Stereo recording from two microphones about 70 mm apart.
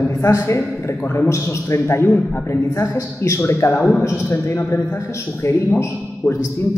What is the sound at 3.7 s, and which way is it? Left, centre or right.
Speech, centre.